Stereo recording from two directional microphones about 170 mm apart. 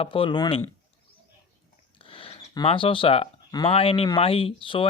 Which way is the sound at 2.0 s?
30° left (ahead or behind).